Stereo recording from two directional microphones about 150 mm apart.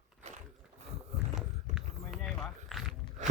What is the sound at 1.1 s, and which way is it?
Horse, 45° right (ahead or behind).